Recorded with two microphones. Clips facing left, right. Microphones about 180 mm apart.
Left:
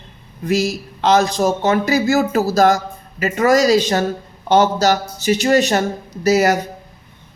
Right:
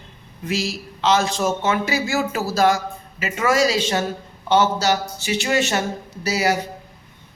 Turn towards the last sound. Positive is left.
turn(degrees=45)  # may be behind; listen again after turning